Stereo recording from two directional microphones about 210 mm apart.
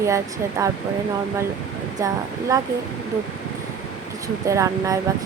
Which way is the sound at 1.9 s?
15° right (ahead or behind).